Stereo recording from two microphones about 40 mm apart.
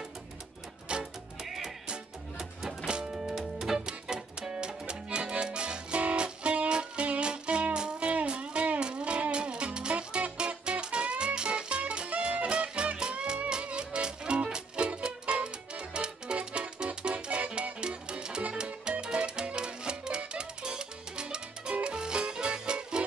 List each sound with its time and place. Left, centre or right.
0.9 s music: right
1.4 s music: centre
3.8 s music: right
17.7 s music: right